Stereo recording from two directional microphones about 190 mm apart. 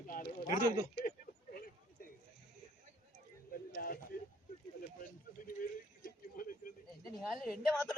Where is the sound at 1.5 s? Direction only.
50° left (ahead or behind).